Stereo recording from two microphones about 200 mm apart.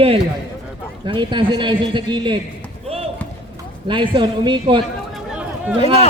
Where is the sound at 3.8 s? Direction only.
25° right (ahead or behind).